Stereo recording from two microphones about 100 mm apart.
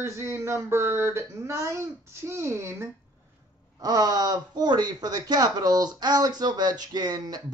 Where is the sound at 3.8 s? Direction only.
40° right (ahead or behind).